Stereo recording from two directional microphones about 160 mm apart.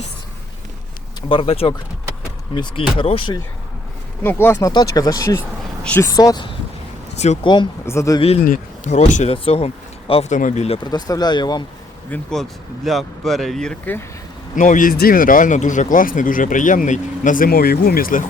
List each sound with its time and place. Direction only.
1.3 s speech: 35° left (ahead or behind)
4.2 s speech: 15° left (ahead or behind)
6.1 s speech: 20° left (ahead or behind)
7.9 s speech: 20° left (ahead or behind)
8.4 s speech: 50° left (ahead or behind)
10.8 s speech: 25° left (ahead or behind)
12.1 s speech: centre (ahead or behind)
14.5 s speech: 55° left (ahead or behind)